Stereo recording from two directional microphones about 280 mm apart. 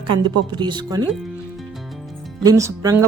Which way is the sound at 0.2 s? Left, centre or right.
Centre.